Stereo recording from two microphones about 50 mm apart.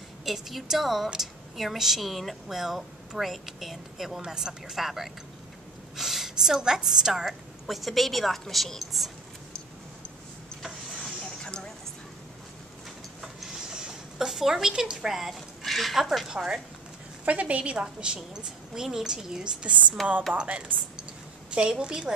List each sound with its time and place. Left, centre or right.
0.2 s a woman's voice: centre
11.2 s a sound: centre
13.2 s mechanisms: centre
15.1 s speech: centre
17.2 s a woman's voice: right
20.0 s speech: centre
20.3 s a woman's voice: right